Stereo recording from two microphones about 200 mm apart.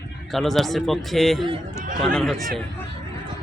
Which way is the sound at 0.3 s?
Centre (ahead or behind).